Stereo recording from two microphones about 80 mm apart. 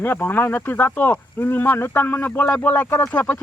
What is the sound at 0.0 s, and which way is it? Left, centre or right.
Speech, left.